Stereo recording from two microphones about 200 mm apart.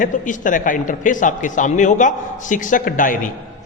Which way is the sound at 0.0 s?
40° left (ahead or behind).